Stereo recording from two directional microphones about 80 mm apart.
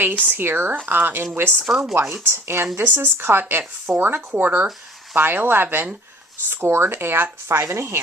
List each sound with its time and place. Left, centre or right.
0.3 s speech: right
1.6 s speech: centre
2.2 s speech: right